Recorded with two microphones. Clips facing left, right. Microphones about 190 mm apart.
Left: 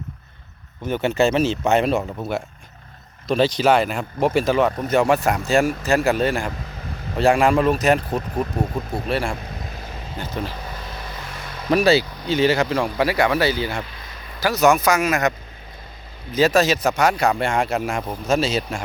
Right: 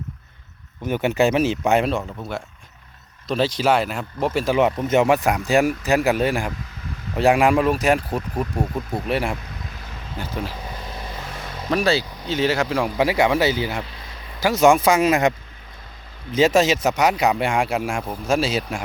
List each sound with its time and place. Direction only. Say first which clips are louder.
0.9 s speech: even; 15° right (ahead or behind)
2.0 s speech: left 4 dB; 25° left (ahead or behind)
3.2 s speech: left 2 dB; 5° right (ahead or behind)
4.5 s speech: right 1 dB; 20° right (ahead or behind)
10.2 s speech: even; 5° right (ahead or behind)
10.7 s vehicle: right 1 dB; 20° right (ahead or behind)
11.7 s speech: left 4 dB; 15° left (ahead or behind)
11.9 s speech: left 3 dB; centre (ahead or behind)
13.0 s speech: right 1 dB; 20° right (ahead or behind)
16.3 s speech: even; 25° right (ahead or behind)
17.7 s speech: left 1 dB; centre (ahead or behind)
18.3 s speech: left 1 dB; 10° right (ahead or behind)